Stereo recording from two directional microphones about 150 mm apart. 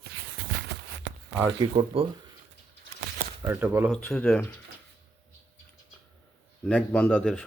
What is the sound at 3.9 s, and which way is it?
Speech, 5° left (ahead or behind).